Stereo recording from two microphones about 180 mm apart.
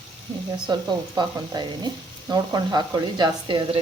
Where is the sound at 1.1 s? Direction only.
20° right (ahead or behind).